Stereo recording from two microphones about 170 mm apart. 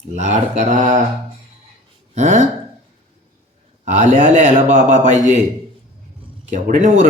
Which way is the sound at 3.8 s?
45° right (ahead or behind).